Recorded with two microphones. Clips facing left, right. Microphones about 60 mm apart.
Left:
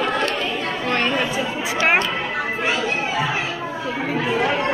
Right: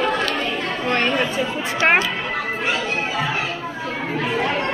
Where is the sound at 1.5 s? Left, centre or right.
Centre.